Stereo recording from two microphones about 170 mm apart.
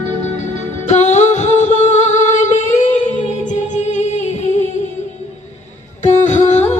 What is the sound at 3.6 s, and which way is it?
Music, 45° left (ahead or behind).